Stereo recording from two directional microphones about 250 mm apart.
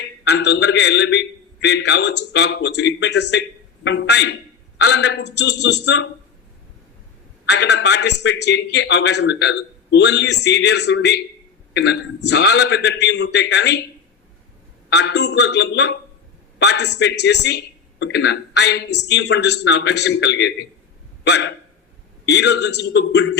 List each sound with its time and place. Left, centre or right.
0.3 s a man's voice: left
7.4 s a man's voice: left
14.8 s a man's voice: left
21.2 s hiccup: left
22.3 s a man's voice: left